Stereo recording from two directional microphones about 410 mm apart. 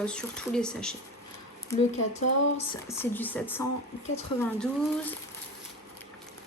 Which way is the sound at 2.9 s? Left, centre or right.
Centre.